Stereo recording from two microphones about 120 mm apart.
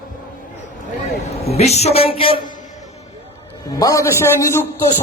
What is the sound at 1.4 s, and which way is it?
Speech, 60° left (ahead or behind).